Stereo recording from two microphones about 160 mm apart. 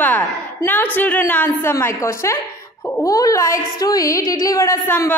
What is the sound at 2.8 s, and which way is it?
Wail, 20° left (ahead or behind).